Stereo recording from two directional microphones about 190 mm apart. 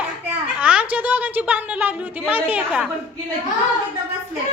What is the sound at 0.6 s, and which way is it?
A woman's voice, 5° right (ahead or behind).